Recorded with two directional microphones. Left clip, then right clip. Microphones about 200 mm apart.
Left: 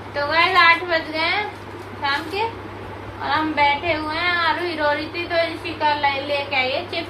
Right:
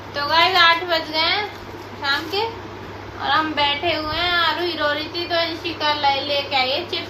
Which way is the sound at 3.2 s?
15° right (ahead or behind).